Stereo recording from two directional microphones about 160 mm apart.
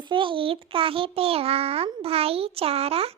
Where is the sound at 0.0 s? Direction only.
30° right (ahead or behind).